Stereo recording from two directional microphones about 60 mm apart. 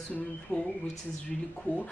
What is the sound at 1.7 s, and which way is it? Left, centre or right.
Speech, left.